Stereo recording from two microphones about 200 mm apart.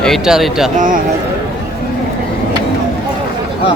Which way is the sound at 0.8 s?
40° right (ahead or behind).